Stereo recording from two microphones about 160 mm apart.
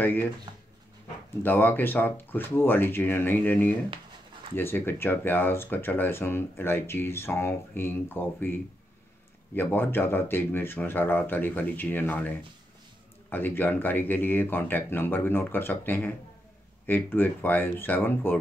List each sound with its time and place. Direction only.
0.0 s speech: 10° left (ahead or behind)
1.4 s speech: 10° left (ahead or behind)
9.6 s speech: 10° left (ahead or behind)